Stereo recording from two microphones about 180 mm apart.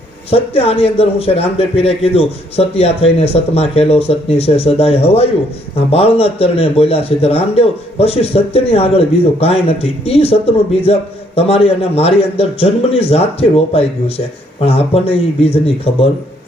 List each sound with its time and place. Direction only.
0.3 s a man's voice: 35° left (ahead or behind)
14.6 s a man's voice: 35° left (ahead or behind)